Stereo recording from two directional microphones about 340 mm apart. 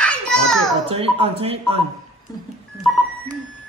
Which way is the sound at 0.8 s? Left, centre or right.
Centre.